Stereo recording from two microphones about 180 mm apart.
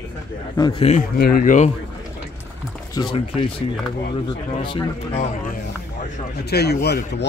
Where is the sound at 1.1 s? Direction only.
55° left (ahead or behind).